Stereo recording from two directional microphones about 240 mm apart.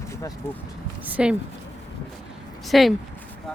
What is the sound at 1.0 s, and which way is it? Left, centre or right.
Speech, centre.